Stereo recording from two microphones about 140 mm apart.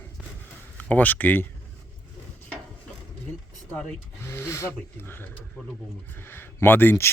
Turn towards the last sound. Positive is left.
turn(degrees=15)  # may be behind; listen again after turning